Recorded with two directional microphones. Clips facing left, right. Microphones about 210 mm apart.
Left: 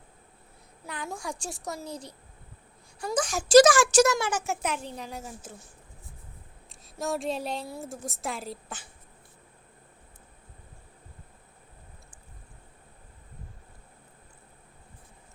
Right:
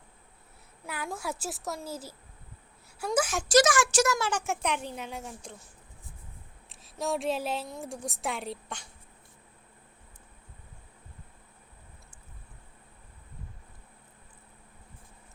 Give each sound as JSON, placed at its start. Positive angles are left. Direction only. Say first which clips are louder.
{"t": 0.9, "sound": "a woman's voice", "louder": "right 1 dB", "side_deg": -5}
{"t": 3.2, "sound": "a woman's voice", "louder": "right 1 dB", "side_deg": -5}
{"t": 3.6, "sound": "speech", "louder": "left 6 dB", "side_deg": 35}
{"t": 4.1, "sound": "a woman's voice", "louder": "left 1 dB", "side_deg": 10}
{"t": 6.9, "sound": "a woman's voice", "louder": "even", "side_deg": 0}